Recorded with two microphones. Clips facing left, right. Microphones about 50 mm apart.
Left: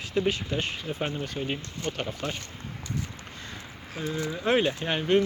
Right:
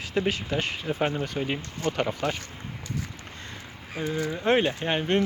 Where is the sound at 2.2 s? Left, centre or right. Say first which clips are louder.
Right 3 dB; right.